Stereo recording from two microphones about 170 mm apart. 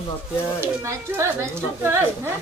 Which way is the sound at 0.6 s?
15° right (ahead or behind).